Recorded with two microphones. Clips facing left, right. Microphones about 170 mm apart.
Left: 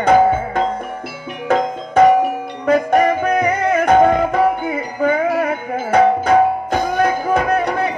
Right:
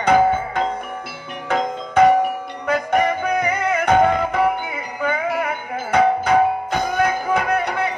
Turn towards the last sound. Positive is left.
turn(degrees=45)  # may be behind; listen again after turning